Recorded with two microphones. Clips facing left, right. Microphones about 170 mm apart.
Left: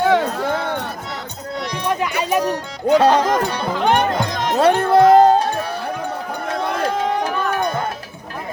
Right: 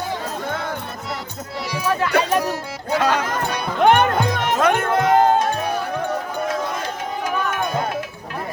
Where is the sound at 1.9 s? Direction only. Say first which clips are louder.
Even; 15° left (ahead or behind).